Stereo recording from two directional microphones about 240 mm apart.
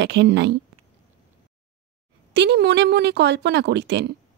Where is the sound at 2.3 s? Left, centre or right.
Right.